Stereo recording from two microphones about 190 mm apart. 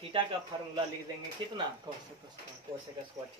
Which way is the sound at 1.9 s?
25° right (ahead or behind).